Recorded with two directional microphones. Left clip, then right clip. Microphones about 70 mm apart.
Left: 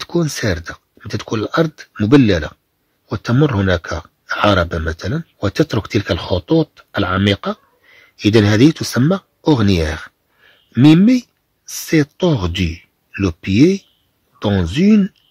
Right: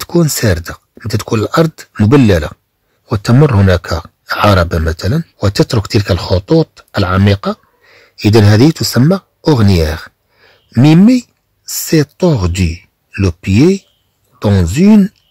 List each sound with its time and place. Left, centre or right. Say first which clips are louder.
0.0 s speech: right 6 dB; right
2.0 s speech: right 3 dB; right
3.1 s speech: right 6 dB; right
3.4 s speech: right 3 dB; right
5.6 s speech: right 4 dB; right
6.1 s speech: right 5 dB; right